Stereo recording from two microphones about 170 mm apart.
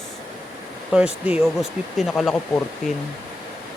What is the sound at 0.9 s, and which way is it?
Speech, 5° right (ahead or behind).